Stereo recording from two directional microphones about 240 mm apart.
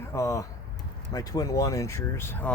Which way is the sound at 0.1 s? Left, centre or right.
Centre.